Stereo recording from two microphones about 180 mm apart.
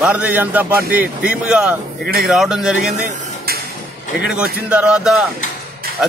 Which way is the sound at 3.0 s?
45° right (ahead or behind).